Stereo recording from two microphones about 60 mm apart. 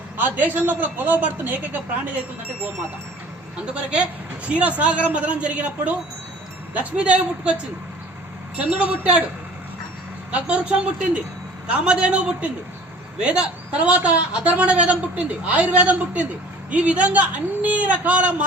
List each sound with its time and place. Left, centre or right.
0.2 s a woman's voice: right
4.4 s a woman's voice: right
8.5 s a woman's voice: right
10.4 s a woman's voice: centre